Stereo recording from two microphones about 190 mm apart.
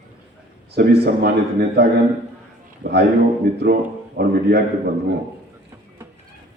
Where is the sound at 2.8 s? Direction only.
60° right (ahead or behind).